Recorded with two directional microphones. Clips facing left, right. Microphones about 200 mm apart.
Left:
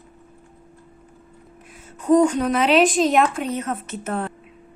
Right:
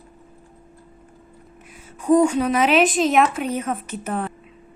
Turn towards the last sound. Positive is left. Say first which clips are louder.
# even
turn(degrees=-10)  # may be behind; listen again after turning